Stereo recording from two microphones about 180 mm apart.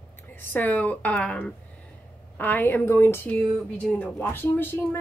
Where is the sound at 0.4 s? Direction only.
10° left (ahead or behind).